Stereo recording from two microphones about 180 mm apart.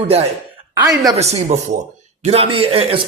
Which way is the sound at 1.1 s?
35° right (ahead or behind).